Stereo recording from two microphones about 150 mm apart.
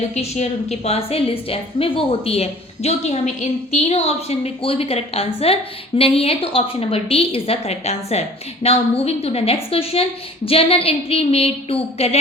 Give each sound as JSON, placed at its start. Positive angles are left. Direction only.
{"t": 0.1, "sound": "a woman's voice", "side_deg": 45}